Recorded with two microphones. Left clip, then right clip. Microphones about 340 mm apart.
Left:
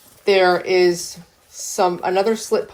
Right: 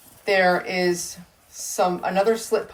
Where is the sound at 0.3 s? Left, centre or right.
Left.